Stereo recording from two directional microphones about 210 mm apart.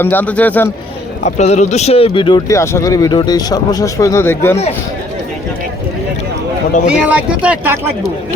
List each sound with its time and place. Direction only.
0.0 s speech: 10° left (ahead or behind)
1.2 s speech: 35° left (ahead or behind); by 4.5 s 10° left (ahead or behind)
6.8 s speech: 5° right (ahead or behind)